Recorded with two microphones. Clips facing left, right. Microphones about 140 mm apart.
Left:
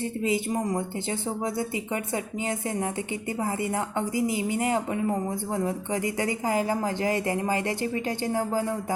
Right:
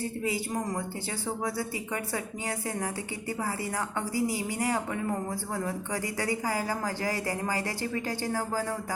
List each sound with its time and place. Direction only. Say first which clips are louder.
0.0 s a woman's voice: left 5 dB; 20° left (ahead or behind)